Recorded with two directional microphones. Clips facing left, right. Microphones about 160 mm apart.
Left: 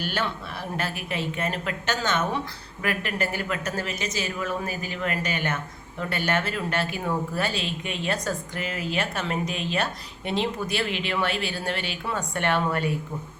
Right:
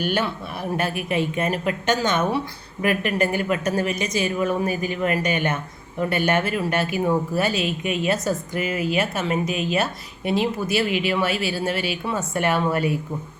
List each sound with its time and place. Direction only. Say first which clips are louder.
0.0 s speech: right 5 dB; 15° right (ahead or behind)